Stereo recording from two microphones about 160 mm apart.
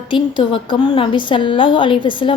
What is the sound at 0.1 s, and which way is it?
A woman's voice, 30° left (ahead or behind).